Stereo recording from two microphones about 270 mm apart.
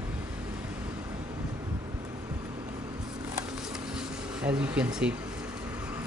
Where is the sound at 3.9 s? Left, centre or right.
Centre.